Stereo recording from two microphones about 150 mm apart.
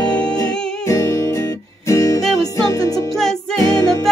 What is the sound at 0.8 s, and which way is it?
Music, 20° left (ahead or behind).